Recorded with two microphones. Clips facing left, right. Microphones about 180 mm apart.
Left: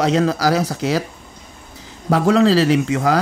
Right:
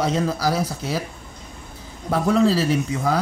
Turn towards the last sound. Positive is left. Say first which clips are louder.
# left 5 dB
turn(degrees=80)